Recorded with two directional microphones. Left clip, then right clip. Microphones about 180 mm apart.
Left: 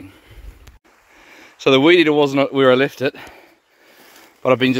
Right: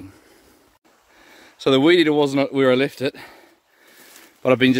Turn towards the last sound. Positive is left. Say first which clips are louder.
# left 1 dB
turn(degrees=-25)  # may be behind; listen again after turning